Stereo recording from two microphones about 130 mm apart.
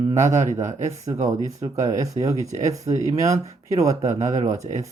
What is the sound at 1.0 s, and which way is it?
Speech, 25° right (ahead or behind).